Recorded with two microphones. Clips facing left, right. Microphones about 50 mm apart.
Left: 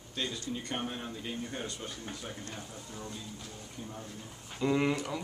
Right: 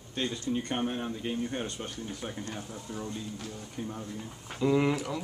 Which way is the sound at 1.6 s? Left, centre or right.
Right.